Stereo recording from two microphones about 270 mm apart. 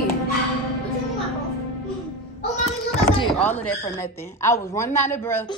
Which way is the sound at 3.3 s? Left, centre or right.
Centre.